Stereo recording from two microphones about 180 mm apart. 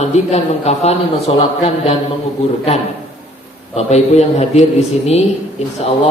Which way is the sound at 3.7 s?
40° left (ahead or behind).